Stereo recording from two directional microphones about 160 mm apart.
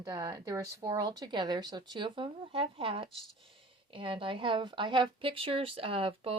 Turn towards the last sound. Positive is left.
turn(degrees=-35)  # may be behind; listen again after turning